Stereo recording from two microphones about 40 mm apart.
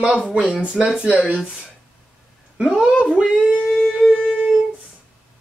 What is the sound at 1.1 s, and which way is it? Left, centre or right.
Speech, right.